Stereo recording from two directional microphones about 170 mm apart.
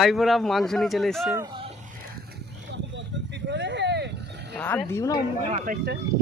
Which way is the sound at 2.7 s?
90° right.